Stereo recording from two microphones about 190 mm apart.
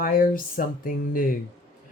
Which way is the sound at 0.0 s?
45° left (ahead or behind).